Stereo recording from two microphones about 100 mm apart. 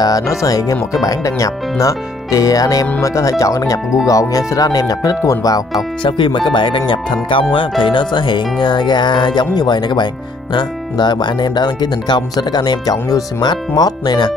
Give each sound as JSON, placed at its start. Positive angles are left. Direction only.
{"t": 0.0, "sound": "speech", "side_deg": 35}
{"t": 6.0, "sound": "speech", "side_deg": 50}